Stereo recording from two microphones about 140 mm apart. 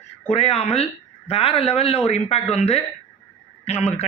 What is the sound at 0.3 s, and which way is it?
Speech, 45° left (ahead or behind).